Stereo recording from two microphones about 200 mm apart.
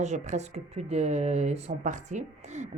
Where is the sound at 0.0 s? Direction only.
35° right (ahead or behind).